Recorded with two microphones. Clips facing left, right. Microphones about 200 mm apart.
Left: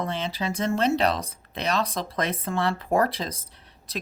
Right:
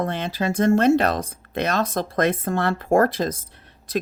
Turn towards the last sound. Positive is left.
turn(degrees=-50)  # may be behind; listen again after turning